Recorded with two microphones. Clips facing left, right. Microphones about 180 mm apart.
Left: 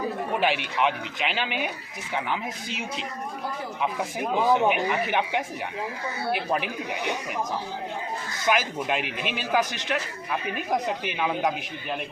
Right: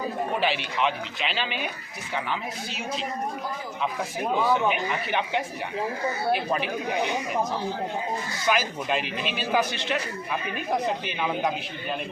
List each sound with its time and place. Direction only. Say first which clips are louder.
0.3 s a man's voice: left 3 dB; 10° left (ahead or behind)
4.2 s a man's voice: left 2 dB; 15° left (ahead or behind)
8.5 s a man's voice: left 1 dB; 10° left (ahead or behind)
11.2 s a man's voice: left 2 dB; 5° left (ahead or behind)